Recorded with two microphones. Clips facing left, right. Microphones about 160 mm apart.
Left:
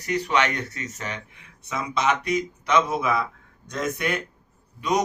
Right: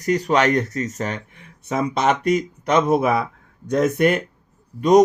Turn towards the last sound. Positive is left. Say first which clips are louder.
# right 11 dB
turn(degrees=-45)  # may be behind; listen again after turning